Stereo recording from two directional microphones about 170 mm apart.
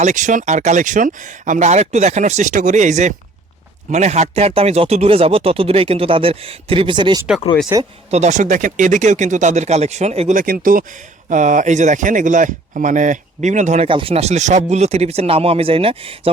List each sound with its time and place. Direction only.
0.0 s speech: 45° right (ahead or behind); by 7.3 s 25° right (ahead or behind)
7.7 s speech: 15° right (ahead or behind)
8.1 s speech: 45° right (ahead or behind)
13.8 s speech: 30° right (ahead or behind)